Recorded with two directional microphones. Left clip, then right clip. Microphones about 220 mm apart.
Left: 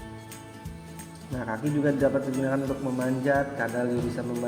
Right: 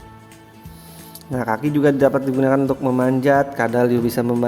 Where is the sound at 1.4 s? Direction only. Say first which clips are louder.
Right 10 dB; 50° right (ahead or behind).